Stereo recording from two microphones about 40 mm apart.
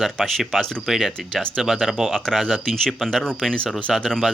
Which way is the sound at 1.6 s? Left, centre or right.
Centre.